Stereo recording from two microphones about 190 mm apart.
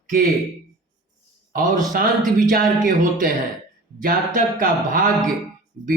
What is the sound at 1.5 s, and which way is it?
Speech, 45° right (ahead or behind).